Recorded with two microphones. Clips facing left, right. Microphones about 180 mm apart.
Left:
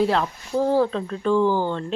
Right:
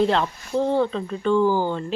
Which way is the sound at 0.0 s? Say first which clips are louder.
Right 1 dB; 5° left (ahead or behind).